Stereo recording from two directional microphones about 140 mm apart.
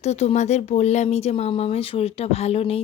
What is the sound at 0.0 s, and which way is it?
A woman's voice, 50° left (ahead or behind).